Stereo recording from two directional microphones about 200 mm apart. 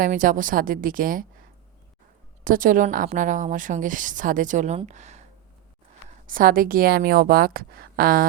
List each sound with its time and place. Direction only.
0.0 s a woman's voice: 40° right (ahead or behind)
2.4 s a woman's voice: 45° right (ahead or behind)
6.2 s a woman's voice: 45° right (ahead or behind)